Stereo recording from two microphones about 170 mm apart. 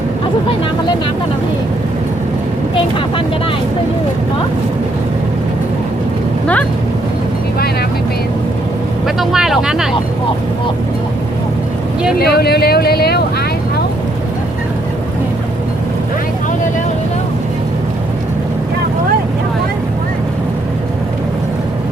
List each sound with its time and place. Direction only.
9.0 s speech: centre (ahead or behind)
12.2 s speech: 70° left (ahead or behind)